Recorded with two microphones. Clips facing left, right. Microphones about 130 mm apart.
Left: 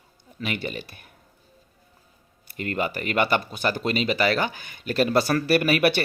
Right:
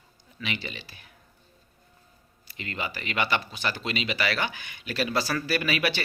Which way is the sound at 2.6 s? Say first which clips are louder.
Left 8 dB; 50° left (ahead or behind).